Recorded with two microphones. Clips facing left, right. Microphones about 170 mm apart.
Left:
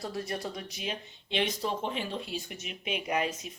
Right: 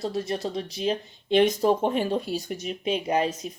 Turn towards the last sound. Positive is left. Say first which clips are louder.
# right 7 dB
turn(degrees=-30)  # may be behind; listen again after turning